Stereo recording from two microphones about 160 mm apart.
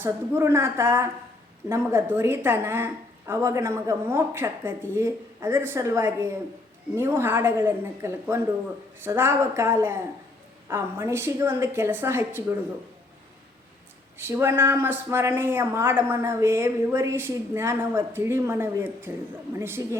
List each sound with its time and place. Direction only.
0.0 s speech: 15° right (ahead or behind)
14.2 s speech: 15° right (ahead or behind)